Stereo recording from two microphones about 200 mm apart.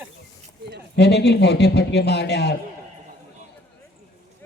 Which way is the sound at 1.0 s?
55° left (ahead or behind).